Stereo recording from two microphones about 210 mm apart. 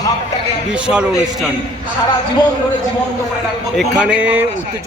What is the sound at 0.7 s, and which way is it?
Speech, 5° right (ahead or behind).